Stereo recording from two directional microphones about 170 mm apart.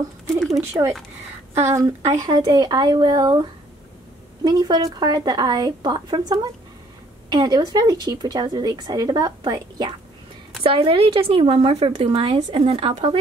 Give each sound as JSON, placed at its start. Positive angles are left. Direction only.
{"t": 1.5, "sound": "speech", "side_deg": -15}
{"t": 4.5, "sound": "a woman's voice", "side_deg": -25}